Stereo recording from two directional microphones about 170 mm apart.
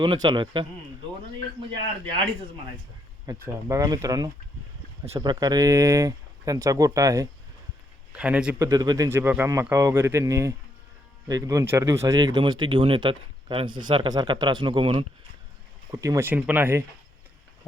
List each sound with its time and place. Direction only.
0.0 s speech: 25° right (ahead or behind)
3.2 s speech: 15° right (ahead or behind)
8.1 s speech: 5° right (ahead or behind)
8.6 s speech: 20° right (ahead or behind)
15.9 s speech: 20° right (ahead or behind)